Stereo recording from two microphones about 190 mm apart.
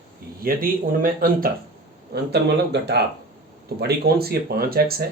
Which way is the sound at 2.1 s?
60° right (ahead or behind).